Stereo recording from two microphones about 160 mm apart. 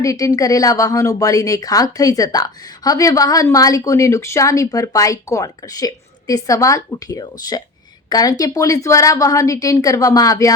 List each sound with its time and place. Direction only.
0.0 s speech: 20° left (ahead or behind)